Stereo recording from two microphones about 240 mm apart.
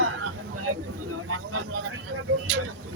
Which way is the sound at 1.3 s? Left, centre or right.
Right.